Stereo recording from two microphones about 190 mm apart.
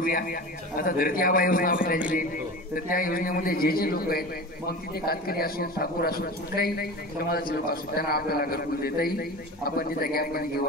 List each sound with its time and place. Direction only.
0.0 s a man's voice: 50° left (ahead or behind)